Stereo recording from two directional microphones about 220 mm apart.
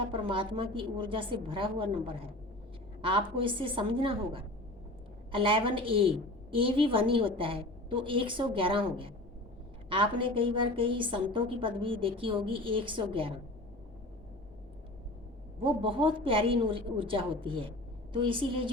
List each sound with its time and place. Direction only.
0.0 s a woman's voice: 25° right (ahead or behind)
15.6 s a woman's voice: 25° right (ahead or behind)